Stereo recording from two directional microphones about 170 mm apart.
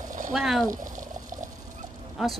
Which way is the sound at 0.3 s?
Centre (ahead or behind).